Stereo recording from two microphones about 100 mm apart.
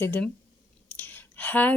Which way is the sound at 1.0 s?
20° left (ahead or behind).